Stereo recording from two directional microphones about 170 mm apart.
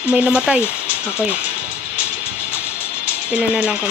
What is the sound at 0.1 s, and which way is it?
Speech, 5° right (ahead or behind).